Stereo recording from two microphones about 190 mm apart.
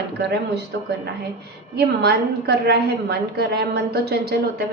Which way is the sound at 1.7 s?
60° right (ahead or behind).